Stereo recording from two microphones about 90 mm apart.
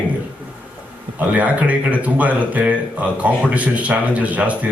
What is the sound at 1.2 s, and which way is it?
Speech, 15° right (ahead or behind).